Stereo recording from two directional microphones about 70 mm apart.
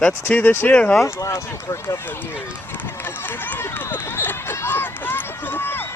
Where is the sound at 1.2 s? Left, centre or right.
Left.